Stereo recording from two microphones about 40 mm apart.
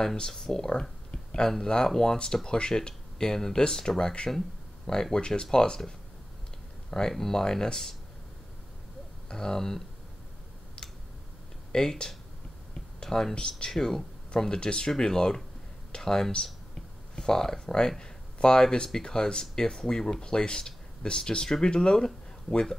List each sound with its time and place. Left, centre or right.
0.0 s speech: centre
1.1 s a sound: left
1.5 s speech: centre
9.3 s speech: centre
11.7 s speech: centre